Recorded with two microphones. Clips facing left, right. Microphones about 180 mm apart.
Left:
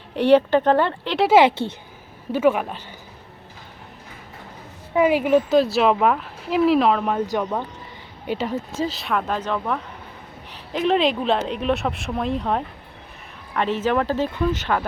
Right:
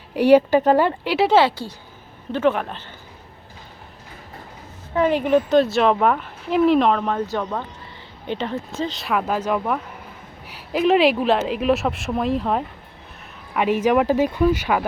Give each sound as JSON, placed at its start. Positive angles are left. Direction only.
{"t": 0.2, "sound": "speech", "side_deg": -10}
{"t": 1.3, "sound": "speech", "side_deg": 15}
{"t": 2.3, "sound": "speech", "side_deg": 10}
{"t": 4.9, "sound": "speech", "side_deg": 10}